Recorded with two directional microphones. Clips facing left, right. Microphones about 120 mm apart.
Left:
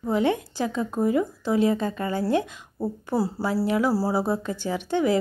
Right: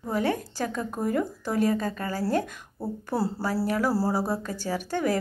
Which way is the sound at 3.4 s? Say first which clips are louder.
Left 4 dB; 20° left (ahead or behind).